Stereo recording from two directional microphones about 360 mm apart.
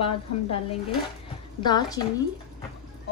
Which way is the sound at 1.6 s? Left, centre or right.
Centre.